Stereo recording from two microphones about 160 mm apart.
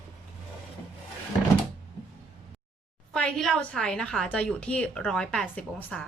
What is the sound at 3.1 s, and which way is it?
A woman's voice, 5° left (ahead or behind).